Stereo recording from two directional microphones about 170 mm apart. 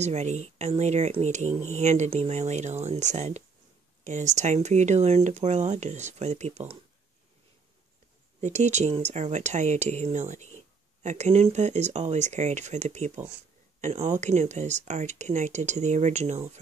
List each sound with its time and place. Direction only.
0.0 s speech: 40° right (ahead or behind)
8.4 s speech: 45° right (ahead or behind)